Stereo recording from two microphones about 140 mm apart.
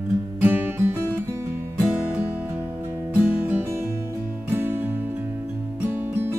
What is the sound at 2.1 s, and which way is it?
Music, 15° right (ahead or behind).